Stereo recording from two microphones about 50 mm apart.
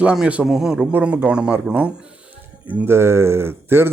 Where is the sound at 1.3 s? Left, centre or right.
Right.